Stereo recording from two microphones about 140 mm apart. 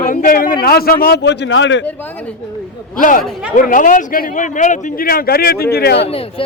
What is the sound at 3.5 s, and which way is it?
A man's voice, 70° left (ahead or behind).